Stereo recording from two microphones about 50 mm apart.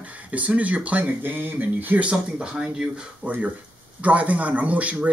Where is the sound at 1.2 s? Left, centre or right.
Right.